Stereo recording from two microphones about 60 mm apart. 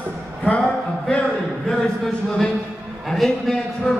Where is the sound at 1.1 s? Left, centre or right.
Centre.